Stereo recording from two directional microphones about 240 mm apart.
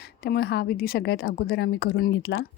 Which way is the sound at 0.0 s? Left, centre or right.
Left.